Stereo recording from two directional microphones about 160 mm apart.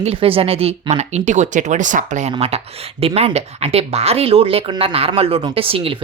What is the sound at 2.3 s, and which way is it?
Speech, 40° right (ahead or behind).